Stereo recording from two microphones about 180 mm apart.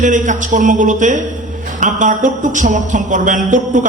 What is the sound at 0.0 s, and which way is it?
A man's voice, 45° right (ahead or behind).